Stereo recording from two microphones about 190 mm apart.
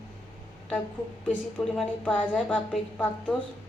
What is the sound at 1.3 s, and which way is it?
A woman's voice, 5° left (ahead or behind).